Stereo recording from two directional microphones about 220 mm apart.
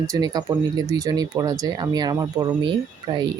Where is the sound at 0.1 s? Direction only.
15° right (ahead or behind).